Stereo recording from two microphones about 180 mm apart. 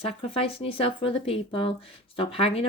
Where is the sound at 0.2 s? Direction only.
30° left (ahead or behind).